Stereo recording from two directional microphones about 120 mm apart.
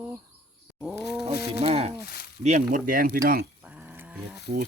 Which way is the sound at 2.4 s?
90° right.